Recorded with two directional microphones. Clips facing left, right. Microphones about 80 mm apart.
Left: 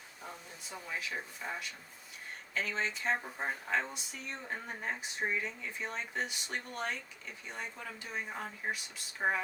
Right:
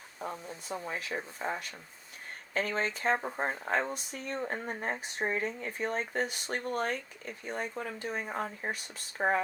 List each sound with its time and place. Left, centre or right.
0.2 s speech: right